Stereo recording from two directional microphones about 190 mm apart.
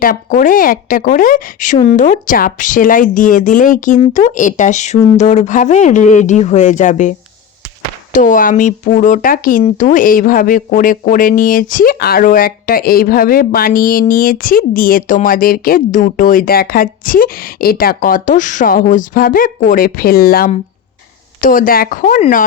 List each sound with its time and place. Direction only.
0.0 s speech: 45° left (ahead or behind)
8.1 s speech: 45° left (ahead or behind)